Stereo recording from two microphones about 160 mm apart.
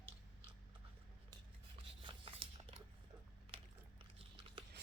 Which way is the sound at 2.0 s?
30° right (ahead or behind).